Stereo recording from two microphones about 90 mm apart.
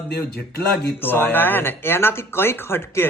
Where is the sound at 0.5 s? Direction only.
25° left (ahead or behind).